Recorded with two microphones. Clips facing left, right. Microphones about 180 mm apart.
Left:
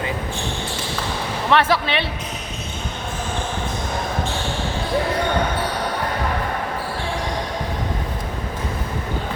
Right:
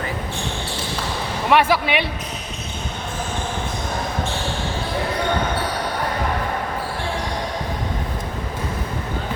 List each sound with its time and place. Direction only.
1.5 s speech: 10° right (ahead or behind)